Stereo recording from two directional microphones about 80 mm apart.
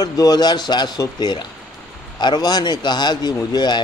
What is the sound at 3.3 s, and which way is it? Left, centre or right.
Speech, left.